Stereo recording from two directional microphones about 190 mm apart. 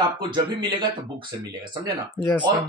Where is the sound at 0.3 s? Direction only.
25° right (ahead or behind).